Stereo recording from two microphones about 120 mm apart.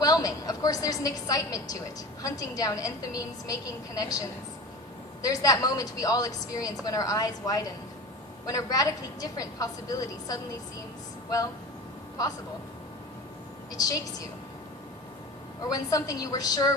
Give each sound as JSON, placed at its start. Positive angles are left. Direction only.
{"t": 0.0, "sound": "a sound", "side_deg": 30}
{"t": 2.2, "sound": "a woman's voice", "side_deg": 30}
{"t": 5.2, "sound": "a woman's voice", "side_deg": 30}
{"t": 13.8, "sound": "a woman's voice", "side_deg": 30}
{"t": 15.6, "sound": "a woman's voice", "side_deg": 30}